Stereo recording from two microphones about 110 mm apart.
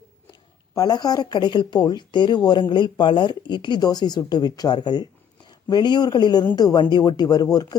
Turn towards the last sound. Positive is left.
turn(degrees=35)  # may be behind; listen again after turning